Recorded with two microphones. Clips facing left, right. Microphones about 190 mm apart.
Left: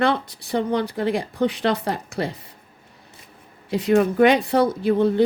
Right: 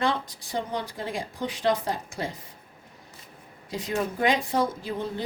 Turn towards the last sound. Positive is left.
turn(degrees=65)  # may be behind; listen again after turning